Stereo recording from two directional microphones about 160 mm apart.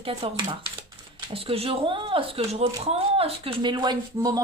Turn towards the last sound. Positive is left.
turn(degrees=-25)  # may be behind; listen again after turning